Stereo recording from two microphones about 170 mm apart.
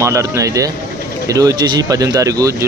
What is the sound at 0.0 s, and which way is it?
Speech, 15° right (ahead or behind).